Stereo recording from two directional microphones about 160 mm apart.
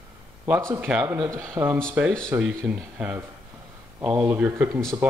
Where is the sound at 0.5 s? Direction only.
15° right (ahead or behind).